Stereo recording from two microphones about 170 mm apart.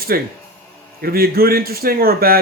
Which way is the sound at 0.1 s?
60° right (ahead or behind).